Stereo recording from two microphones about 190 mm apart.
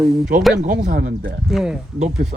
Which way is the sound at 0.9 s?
55° right (ahead or behind).